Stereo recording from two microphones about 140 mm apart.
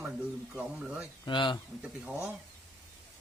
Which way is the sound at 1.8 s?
10° right (ahead or behind).